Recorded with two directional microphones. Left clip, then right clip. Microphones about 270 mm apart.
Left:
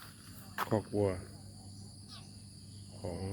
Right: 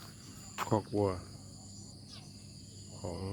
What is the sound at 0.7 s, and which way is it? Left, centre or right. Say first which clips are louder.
Speech: right 1 dB; centre.